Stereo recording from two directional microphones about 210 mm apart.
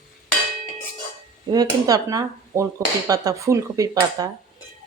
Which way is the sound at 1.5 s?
15° right (ahead or behind).